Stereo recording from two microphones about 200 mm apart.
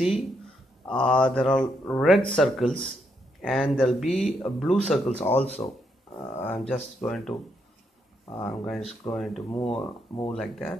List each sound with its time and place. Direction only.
0.0 s speech: centre (ahead or behind)
8.5 s speech: centre (ahead or behind)
9.6 s speech: 25° left (ahead or behind)
10.3 s speech: centre (ahead or behind)